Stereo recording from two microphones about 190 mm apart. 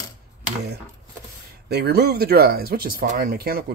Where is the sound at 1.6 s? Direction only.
60° right (ahead or behind).